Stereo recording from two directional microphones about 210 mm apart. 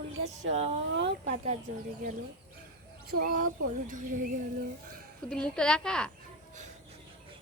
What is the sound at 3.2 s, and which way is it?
Speech, 40° right (ahead or behind).